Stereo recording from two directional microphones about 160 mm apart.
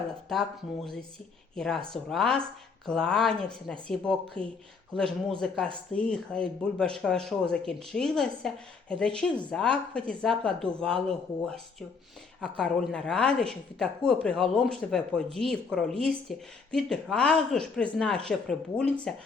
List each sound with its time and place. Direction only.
0.3 s speech: centre (ahead or behind)